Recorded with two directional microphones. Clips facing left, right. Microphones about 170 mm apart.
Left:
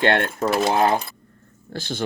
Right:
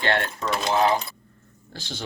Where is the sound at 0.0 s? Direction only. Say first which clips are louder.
Left 5 dB; 55° left (ahead or behind).